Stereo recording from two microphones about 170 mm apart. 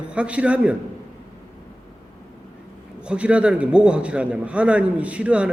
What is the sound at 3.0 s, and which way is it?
A man's voice, 5° right (ahead or behind).